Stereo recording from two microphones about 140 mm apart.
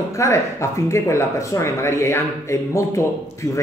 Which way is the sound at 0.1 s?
20° left (ahead or behind).